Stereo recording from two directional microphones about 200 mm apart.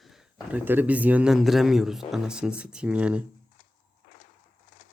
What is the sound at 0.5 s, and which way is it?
A man's voice, 10° right (ahead or behind).